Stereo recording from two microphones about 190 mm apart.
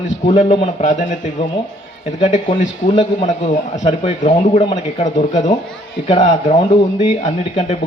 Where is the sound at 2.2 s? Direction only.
35° left (ahead or behind).